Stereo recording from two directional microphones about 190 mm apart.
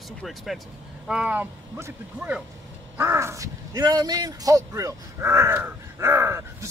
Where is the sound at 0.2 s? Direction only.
Centre (ahead or behind).